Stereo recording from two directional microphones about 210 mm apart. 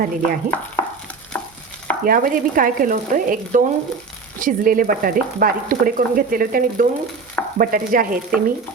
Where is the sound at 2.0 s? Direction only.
40° right (ahead or behind).